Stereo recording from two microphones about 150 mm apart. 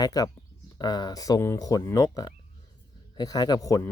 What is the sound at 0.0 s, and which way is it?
Speech, 25° left (ahead or behind).